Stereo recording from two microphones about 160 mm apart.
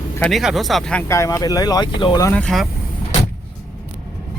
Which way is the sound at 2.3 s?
Centre (ahead or behind).